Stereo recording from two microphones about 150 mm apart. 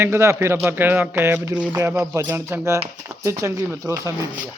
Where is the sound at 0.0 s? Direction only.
20° right (ahead or behind).